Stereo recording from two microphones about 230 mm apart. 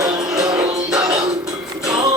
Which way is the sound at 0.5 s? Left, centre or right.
Centre.